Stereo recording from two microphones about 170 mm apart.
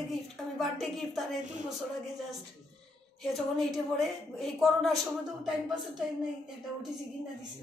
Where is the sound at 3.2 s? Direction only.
Centre (ahead or behind).